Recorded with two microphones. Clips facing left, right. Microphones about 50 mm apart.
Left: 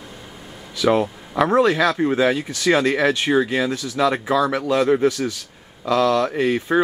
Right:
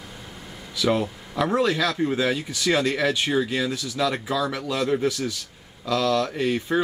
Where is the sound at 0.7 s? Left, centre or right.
Centre.